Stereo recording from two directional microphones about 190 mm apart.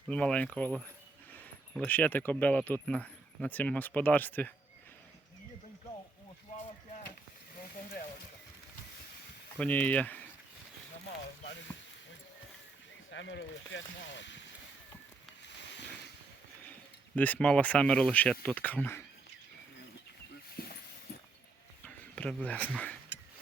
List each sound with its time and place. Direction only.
0.1 s speech: 5° left (ahead or behind)
9.6 s speech: 10° left (ahead or behind)
13.1 s speech: 70° left (ahead or behind)
17.2 s speech: 10° left (ahead or behind)
20.6 s mechanisms: 50° left (ahead or behind)
21.8 s speech: 5° left (ahead or behind)